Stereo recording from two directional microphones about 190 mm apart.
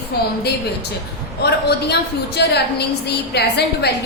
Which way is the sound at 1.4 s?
60° left (ahead or behind).